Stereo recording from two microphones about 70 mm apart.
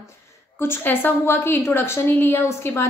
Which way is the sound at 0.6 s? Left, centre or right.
Left.